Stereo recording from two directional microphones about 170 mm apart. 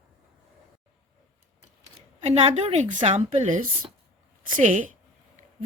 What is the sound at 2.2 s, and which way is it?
A woman's voice, 40° right (ahead or behind).